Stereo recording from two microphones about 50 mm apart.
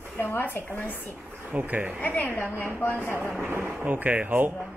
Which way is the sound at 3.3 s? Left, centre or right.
Right.